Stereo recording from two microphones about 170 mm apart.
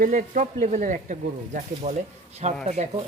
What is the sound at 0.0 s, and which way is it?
Speech, 50° right (ahead or behind).